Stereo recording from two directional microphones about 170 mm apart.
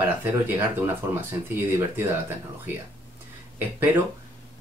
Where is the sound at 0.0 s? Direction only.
10° right (ahead or behind).